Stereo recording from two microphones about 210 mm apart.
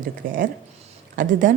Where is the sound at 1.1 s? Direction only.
40° right (ahead or behind).